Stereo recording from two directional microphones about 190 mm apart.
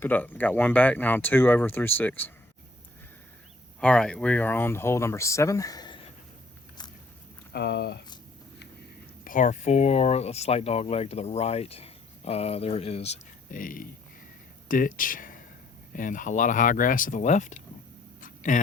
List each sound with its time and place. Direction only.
0.0 s speech: 10° left (ahead or behind)
3.8 s speech: 5° left (ahead or behind); by 6.1 s 25° left (ahead or behind)
7.5 s speech: 60° left (ahead or behind)
9.2 s speech: 40° left (ahead or behind)
18.2 s a sound: 40° left (ahead or behind)